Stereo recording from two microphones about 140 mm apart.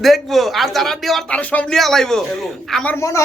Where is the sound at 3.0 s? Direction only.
20° left (ahead or behind).